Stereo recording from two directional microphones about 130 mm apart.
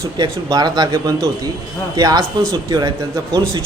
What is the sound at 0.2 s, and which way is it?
Speech, 30° right (ahead or behind).